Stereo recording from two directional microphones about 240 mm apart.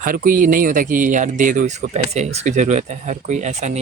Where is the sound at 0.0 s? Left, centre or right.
Right.